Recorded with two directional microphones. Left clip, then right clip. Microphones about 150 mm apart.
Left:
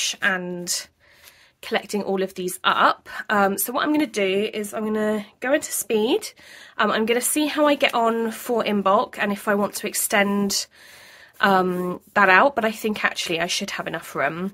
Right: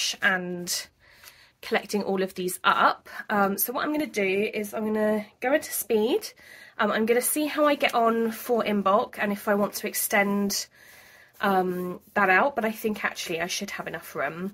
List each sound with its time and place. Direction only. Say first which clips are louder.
0.0 s a woman's voice: left 2 dB; 20° left (ahead or behind); by 14.5 s 45° left (ahead or behind)